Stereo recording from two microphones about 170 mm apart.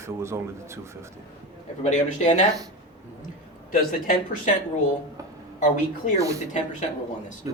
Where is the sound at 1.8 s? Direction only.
45° left (ahead or behind).